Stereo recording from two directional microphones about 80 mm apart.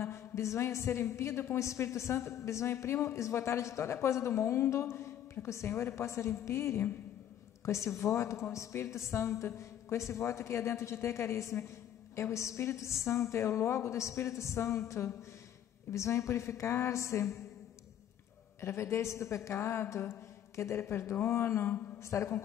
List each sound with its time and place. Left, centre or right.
0.0 s a woman's voice: left
18.6 s a woman's voice: left